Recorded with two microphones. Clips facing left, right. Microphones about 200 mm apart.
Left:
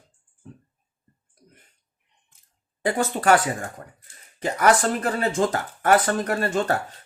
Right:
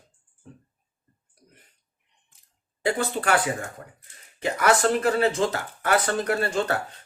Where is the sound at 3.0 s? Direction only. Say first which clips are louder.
Left 7 dB; 45° left (ahead or behind).